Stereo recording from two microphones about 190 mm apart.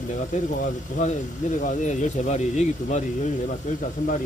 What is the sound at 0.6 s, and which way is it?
Speech, 40° left (ahead or behind).